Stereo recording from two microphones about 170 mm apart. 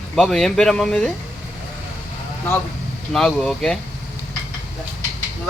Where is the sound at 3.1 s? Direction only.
5° left (ahead or behind).